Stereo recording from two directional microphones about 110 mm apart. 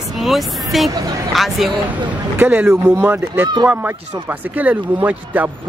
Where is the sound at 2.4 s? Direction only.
15° right (ahead or behind).